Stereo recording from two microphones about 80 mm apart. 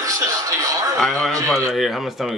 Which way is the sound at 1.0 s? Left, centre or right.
Centre.